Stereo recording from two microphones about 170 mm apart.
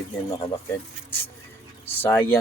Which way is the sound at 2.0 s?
15° left (ahead or behind).